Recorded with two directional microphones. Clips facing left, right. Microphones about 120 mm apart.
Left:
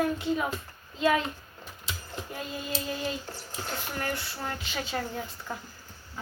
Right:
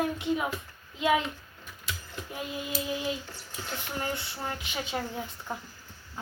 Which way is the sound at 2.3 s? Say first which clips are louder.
Right 1 dB; 15° right (ahead or behind).